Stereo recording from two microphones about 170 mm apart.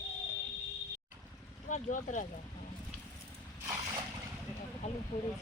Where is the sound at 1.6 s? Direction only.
50° left (ahead or behind).